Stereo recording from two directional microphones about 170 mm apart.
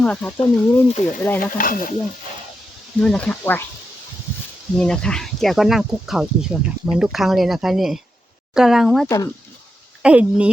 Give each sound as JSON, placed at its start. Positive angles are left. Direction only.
{"t": 0.0, "sound": "speech", "side_deg": 5}
{"t": 1.4, "sound": "speech", "side_deg": 55}
{"t": 3.0, "sound": "speech", "side_deg": 5}
{"t": 4.8, "sound": "speech", "side_deg": 5}
{"t": 9.0, "sound": "speech", "side_deg": 20}
{"t": 10.0, "sound": "speech", "side_deg": -5}